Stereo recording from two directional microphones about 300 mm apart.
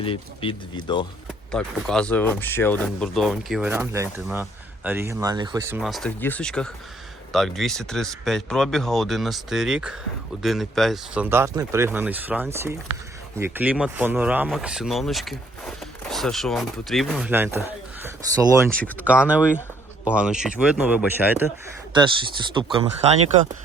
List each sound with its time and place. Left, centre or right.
0.0 s speech: centre
1.5 s speech: centre
22.5 s speech: centre